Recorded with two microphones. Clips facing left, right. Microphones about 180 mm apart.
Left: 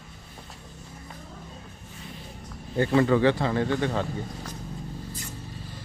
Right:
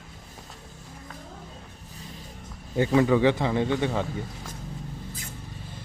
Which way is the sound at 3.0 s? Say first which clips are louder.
Even; 15° right (ahead or behind).